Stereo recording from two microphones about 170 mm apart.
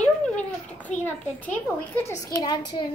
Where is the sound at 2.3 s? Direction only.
60° left (ahead or behind).